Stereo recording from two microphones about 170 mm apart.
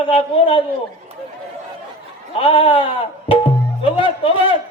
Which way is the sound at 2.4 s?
35° left (ahead or behind).